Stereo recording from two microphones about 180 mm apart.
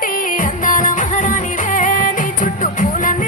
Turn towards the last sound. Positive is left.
turn(degrees=45)  # may be behind; listen again after turning